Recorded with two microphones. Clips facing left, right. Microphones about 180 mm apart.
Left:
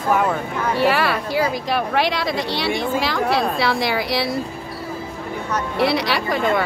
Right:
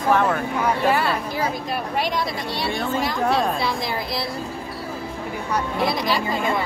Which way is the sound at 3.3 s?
75° left (ahead or behind).